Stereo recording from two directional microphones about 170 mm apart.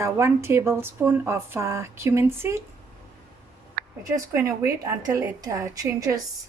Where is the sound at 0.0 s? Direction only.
15° right (ahead or behind).